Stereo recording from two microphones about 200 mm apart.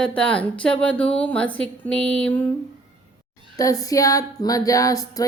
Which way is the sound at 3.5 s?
15° left (ahead or behind).